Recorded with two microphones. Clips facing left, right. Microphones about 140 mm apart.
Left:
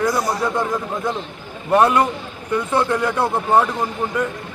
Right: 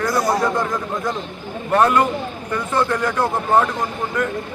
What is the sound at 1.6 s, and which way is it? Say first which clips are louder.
A man's voice: left 1 dB; 10° left (ahead or behind).